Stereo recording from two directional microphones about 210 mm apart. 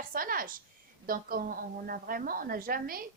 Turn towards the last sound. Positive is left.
turn(degrees=-45)  # may be behind; listen again after turning